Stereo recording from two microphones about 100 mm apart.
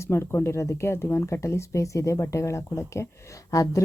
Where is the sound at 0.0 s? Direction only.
25° left (ahead or behind).